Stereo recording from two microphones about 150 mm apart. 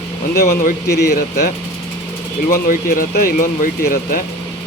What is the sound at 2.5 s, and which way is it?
Speech, 75° left (ahead or behind).